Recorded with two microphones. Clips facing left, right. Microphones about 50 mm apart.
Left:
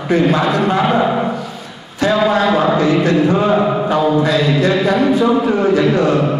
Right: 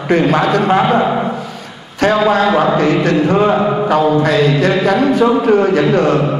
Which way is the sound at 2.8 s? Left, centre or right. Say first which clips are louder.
Even; right.